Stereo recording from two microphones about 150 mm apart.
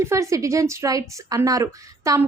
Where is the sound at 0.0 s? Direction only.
20° right (ahead or behind).